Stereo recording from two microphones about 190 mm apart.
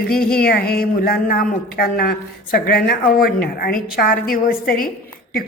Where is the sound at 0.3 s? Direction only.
55° left (ahead or behind).